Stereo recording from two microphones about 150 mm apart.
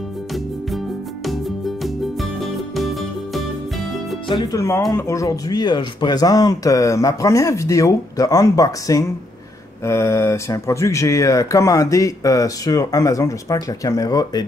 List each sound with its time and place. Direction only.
1.2 s music: centre (ahead or behind)
4.3 s speech: 25° left (ahead or behind)